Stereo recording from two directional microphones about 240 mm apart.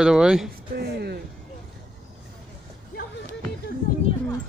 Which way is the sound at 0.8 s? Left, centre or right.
Right.